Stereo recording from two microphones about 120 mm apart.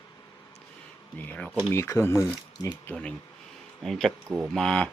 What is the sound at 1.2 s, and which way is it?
Speech, 15° left (ahead or behind).